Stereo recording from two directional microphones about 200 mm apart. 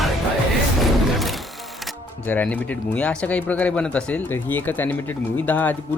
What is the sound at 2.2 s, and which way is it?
Speech, 10° left (ahead or behind).